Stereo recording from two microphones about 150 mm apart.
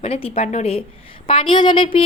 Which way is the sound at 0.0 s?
40° left (ahead or behind).